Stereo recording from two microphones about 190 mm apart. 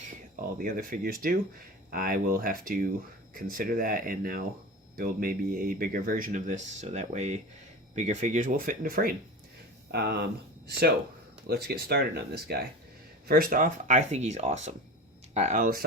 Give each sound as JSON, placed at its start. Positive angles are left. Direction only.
{"t": 0.6, "sound": "speech", "side_deg": -50}
{"t": 9.9, "sound": "speech", "side_deg": -60}